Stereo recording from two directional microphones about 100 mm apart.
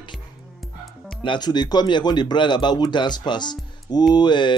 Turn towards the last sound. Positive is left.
turn(degrees=50)  # may be behind; listen again after turning